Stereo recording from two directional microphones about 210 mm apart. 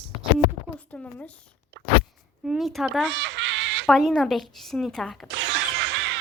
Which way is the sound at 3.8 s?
Centre (ahead or behind).